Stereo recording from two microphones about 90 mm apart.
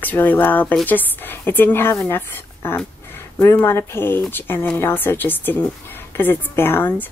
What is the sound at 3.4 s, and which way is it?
Speech, 25° left (ahead or behind).